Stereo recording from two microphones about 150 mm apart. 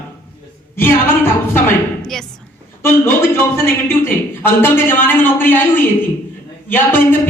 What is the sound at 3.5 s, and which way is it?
A man's voice, 15° left (ahead or behind).